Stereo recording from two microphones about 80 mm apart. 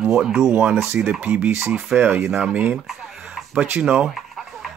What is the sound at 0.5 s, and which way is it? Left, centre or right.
Speech, centre.